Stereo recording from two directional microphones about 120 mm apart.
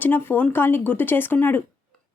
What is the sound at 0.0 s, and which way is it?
Speech, 15° left (ahead or behind).